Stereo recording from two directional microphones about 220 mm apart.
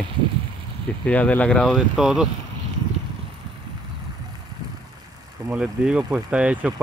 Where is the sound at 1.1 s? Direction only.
5° left (ahead or behind).